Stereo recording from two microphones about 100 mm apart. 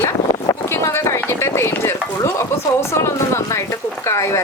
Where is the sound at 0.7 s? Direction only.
30° left (ahead or behind).